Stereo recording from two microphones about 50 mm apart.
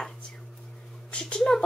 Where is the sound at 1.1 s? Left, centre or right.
Centre.